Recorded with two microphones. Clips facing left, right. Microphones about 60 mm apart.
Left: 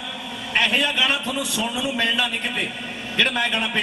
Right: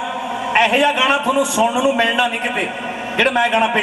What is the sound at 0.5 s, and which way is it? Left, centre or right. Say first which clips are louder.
A man's voice: right 7 dB; right.